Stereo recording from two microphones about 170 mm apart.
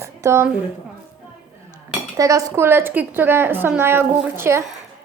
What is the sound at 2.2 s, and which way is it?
A woman's voice, 20° right (ahead or behind).